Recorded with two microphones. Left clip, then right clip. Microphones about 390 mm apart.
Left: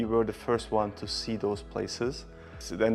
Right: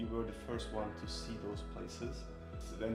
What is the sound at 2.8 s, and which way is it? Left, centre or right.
Speech, left.